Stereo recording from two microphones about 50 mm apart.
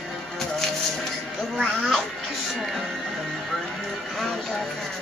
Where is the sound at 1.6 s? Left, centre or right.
Left.